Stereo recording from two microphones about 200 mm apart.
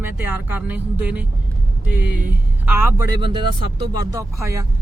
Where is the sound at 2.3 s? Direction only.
10° right (ahead or behind).